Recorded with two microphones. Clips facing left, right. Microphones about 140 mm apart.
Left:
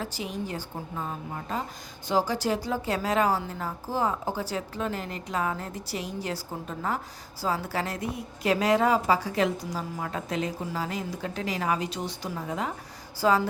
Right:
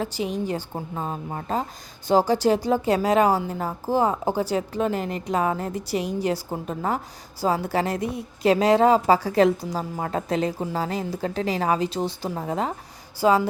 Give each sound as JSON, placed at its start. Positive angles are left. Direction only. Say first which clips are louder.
{"t": 0.0, "sound": "a woman's voice", "louder": "right 7 dB", "side_deg": -20}
{"t": 0.9, "sound": "a woman's voice", "louder": "right 4 dB", "side_deg": -35}
{"t": 13.1, "sound": "a woman's voice", "louder": "right 4 dB", "side_deg": -20}